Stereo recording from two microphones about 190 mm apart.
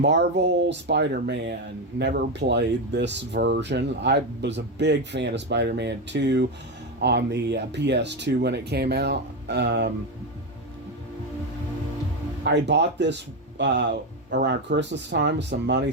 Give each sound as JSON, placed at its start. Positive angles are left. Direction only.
{"t": 0.0, "sound": "speech", "side_deg": -65}
{"t": 12.5, "sound": "speech", "side_deg": -65}